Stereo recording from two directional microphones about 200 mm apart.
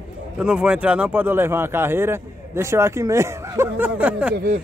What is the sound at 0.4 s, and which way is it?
Speech, 5° right (ahead or behind).